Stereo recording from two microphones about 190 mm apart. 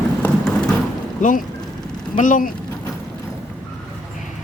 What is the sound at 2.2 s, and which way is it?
Speech, 45° left (ahead or behind).